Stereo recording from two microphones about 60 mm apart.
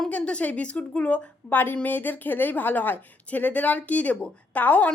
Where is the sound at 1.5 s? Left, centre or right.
Left.